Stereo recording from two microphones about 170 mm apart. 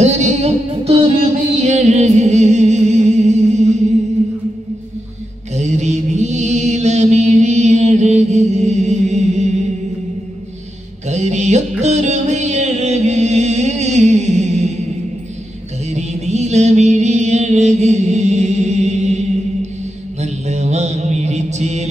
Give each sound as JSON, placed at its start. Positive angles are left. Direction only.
{"t": 0.0, "sound": "music", "side_deg": -40}
{"t": 5.5, "sound": "mantra", "side_deg": -45}
{"t": 11.1, "sound": "mantra", "side_deg": -40}
{"t": 11.8, "sound": "music", "side_deg": -45}
{"t": 15.9, "sound": "music", "side_deg": -40}
{"t": 20.2, "sound": "mantra", "side_deg": -40}